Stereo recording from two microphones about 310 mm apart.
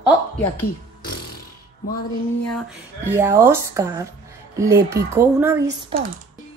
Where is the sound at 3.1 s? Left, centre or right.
Centre.